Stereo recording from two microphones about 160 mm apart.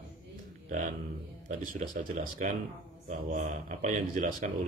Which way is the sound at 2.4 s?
50° right (ahead or behind).